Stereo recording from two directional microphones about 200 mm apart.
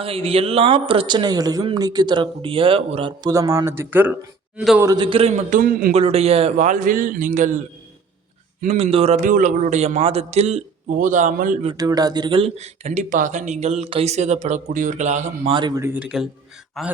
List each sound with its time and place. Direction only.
0.0 s speech: 30° right (ahead or behind); by 5.9 s 45° right (ahead or behind)
5.9 s speech: 30° right (ahead or behind)
8.6 s speech: 30° right (ahead or behind)
11.7 s speech: 20° right (ahead or behind); by 15.5 s 35° right (ahead or behind)
15.5 s a man's voice: 20° right (ahead or behind); by 16.9 s centre (ahead or behind)